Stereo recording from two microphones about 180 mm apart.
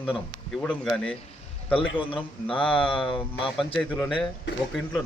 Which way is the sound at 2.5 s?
10° left (ahead or behind).